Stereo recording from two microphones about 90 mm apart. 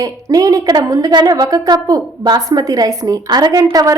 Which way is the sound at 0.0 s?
40° right (ahead or behind).